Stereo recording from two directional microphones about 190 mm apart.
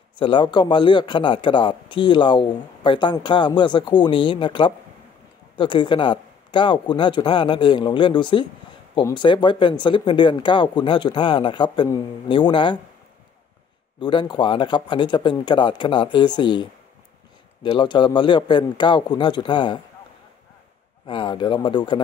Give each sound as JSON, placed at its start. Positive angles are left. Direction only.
{"t": 0.1, "sound": "speech", "side_deg": 25}
{"t": 13.9, "sound": "speech", "side_deg": 25}
{"t": 17.7, "sound": "speech", "side_deg": 25}
{"t": 21.1, "sound": "speech", "side_deg": 25}